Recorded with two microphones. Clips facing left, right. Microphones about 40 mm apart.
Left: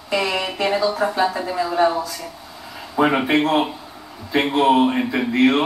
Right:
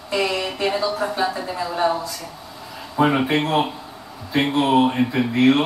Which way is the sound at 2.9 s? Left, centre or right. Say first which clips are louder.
Left 1 dB; centre.